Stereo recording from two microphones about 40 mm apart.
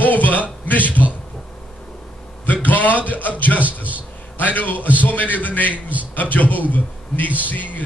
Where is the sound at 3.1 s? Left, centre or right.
Left.